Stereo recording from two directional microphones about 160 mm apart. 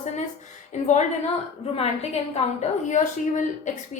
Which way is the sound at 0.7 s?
45° left (ahead or behind).